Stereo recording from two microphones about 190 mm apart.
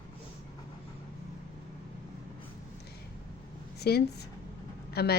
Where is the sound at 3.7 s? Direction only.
60° left (ahead or behind).